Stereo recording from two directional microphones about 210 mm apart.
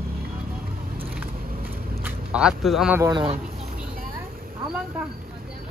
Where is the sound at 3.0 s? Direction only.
25° right (ahead or behind).